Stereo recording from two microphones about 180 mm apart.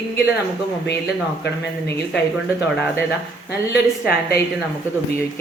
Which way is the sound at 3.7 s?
60° left (ahead or behind).